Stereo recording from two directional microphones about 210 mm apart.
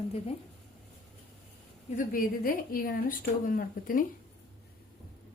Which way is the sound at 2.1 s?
45° left (ahead or behind).